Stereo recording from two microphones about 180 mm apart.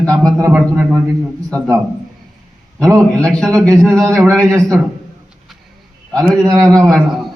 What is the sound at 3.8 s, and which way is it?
Speech, 15° right (ahead or behind).